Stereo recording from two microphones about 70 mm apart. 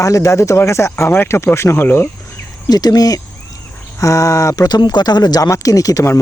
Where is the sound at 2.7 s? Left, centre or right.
Left.